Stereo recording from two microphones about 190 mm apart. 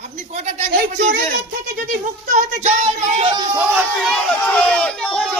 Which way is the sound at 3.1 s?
25° right (ahead or behind).